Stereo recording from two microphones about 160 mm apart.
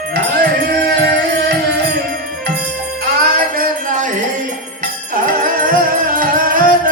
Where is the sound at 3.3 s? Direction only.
65° right (ahead or behind).